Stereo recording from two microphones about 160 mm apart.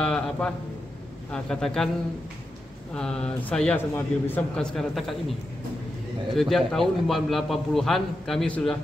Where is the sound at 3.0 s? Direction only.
5° left (ahead or behind).